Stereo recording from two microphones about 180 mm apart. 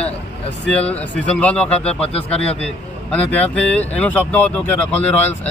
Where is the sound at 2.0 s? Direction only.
35° left (ahead or behind).